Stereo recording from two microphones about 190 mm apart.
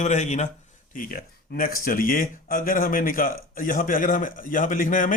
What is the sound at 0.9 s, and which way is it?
A man's voice, 50° left (ahead or behind).